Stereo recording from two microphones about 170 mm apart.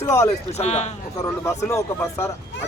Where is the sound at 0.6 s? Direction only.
40° left (ahead or behind).